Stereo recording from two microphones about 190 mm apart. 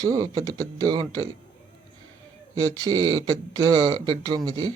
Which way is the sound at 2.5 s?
20° right (ahead or behind).